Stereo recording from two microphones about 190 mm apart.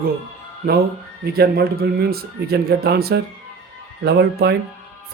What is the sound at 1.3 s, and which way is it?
Speech, 55° right (ahead or behind).